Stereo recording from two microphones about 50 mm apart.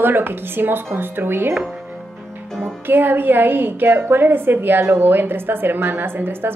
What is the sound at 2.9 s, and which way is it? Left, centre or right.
A woman's voice, right.